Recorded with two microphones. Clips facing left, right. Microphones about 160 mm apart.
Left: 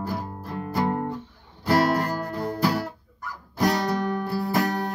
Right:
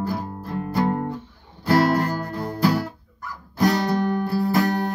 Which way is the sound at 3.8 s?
25° right (ahead or behind).